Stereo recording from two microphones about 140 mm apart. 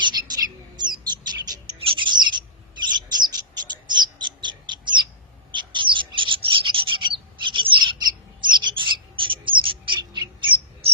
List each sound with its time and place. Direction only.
0.0 s bird: 30° right (ahead or behind)